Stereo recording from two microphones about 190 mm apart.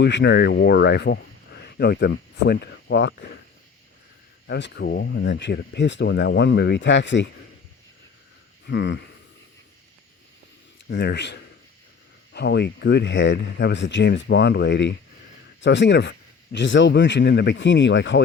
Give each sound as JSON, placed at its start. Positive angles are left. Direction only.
{"t": 0.0, "sound": "speech", "side_deg": 70}
{"t": 4.4, "sound": "speech", "side_deg": 65}
{"t": 8.6, "sound": "speech", "side_deg": 70}
{"t": 10.8, "sound": "speech", "side_deg": 65}